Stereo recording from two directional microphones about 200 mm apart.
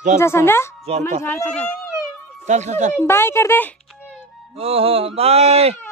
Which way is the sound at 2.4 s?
35° right (ahead or behind).